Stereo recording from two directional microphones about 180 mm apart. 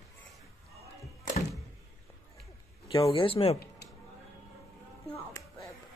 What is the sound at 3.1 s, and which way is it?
Speech, 30° left (ahead or behind).